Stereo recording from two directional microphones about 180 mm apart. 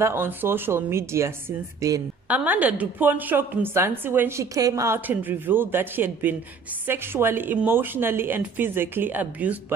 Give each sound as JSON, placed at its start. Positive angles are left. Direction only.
{"t": 0.0, "sound": "a woman's voice", "side_deg": -10}
{"t": 2.2, "sound": "a woman's voice", "side_deg": -10}